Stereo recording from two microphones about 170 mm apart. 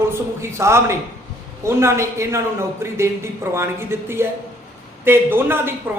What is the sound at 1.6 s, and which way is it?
A man's voice, 15° right (ahead or behind).